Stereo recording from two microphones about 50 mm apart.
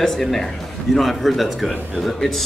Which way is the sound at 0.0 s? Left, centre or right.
Centre.